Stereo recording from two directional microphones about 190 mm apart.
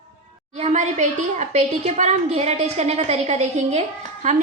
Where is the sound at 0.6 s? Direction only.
35° right (ahead or behind).